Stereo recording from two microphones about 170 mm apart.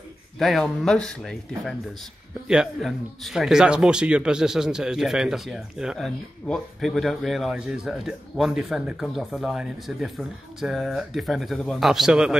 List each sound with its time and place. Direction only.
0.4 s speech: centre (ahead or behind)